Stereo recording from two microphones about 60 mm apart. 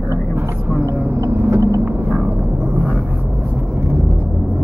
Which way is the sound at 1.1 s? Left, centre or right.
Right.